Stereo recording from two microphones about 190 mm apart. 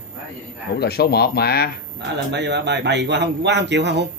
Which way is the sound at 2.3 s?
65° right (ahead or behind).